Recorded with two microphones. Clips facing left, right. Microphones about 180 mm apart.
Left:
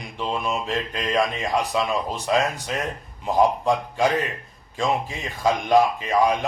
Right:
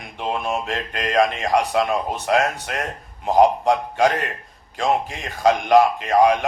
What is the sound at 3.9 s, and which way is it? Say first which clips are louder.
A man's voice: right 2 dB; 70° right (ahead or behind).